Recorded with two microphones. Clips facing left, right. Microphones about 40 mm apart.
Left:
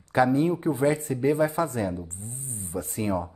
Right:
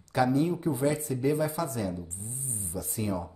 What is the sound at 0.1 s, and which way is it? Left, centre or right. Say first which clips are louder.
Speech: left 4 dB; left.